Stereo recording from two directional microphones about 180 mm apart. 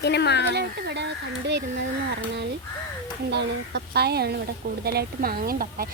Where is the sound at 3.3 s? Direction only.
65° right (ahead or behind).